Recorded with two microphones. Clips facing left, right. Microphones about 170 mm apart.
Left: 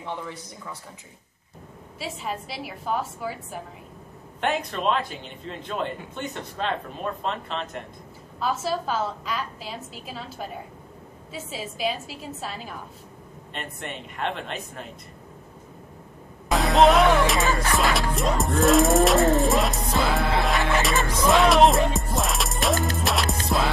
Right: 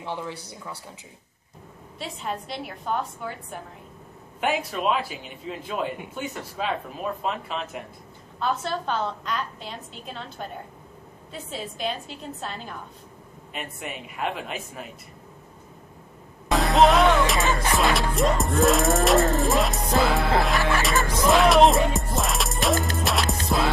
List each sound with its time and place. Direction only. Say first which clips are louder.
2.0 s a woman's voice: even; 5° left (ahead or behind)
16.4 s music: left 1 dB; centre (ahead or behind)